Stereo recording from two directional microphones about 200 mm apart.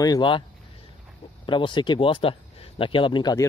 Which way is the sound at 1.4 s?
25° left (ahead or behind).